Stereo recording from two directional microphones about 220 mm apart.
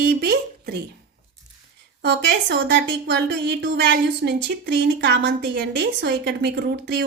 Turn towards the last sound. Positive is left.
turn(degrees=-50)  # may be behind; listen again after turning